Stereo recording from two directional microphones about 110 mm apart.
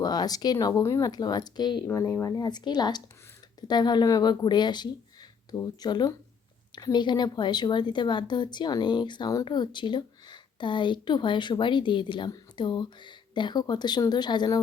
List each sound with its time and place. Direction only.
0.0 s a woman's voice: 35° left (ahead or behind)
0.8 s a woman's voice: 25° left (ahead or behind)
1.9 s speech: 25° left (ahead or behind)
2.3 s a woman's voice: 40° left (ahead or behind)